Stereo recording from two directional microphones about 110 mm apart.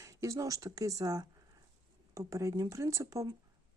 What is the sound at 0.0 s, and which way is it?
Speech, 30° right (ahead or behind).